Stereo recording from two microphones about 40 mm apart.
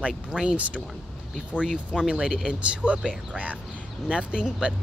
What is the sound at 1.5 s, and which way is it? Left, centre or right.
Speech, right.